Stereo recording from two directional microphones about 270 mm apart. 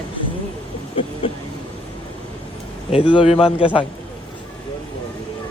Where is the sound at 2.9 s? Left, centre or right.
Centre.